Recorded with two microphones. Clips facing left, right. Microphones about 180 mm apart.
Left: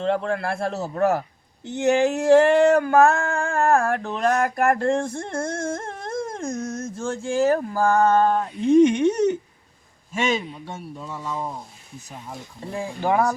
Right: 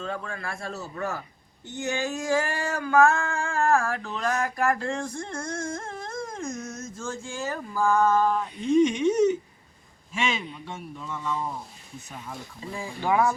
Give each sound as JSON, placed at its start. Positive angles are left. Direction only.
{"t": 0.0, "sound": "speech", "side_deg": 70}
{"t": 1.6, "sound": "a sound", "side_deg": 75}
{"t": 6.4, "sound": "speech", "side_deg": 50}
{"t": 7.1, "sound": "speech", "side_deg": 70}
{"t": 10.1, "sound": "speech", "side_deg": 40}
{"t": 11.2, "sound": "speech", "side_deg": 20}
{"t": 12.5, "sound": "speech", "side_deg": 55}